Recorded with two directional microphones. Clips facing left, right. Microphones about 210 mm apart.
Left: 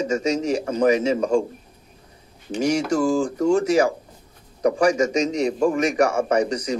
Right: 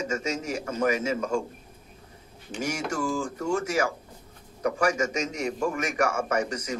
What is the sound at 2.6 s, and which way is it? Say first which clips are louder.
Speech: left 10 dB; 15° left (ahead or behind).